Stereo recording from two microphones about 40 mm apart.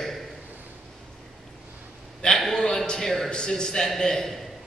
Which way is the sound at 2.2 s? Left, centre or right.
Left.